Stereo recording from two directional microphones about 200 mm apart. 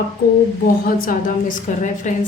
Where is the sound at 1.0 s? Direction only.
40° left (ahead or behind).